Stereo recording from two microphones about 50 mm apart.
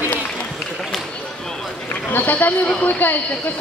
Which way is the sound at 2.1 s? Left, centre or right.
Left.